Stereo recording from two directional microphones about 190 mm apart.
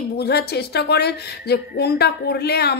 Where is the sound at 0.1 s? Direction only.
60° left (ahead or behind).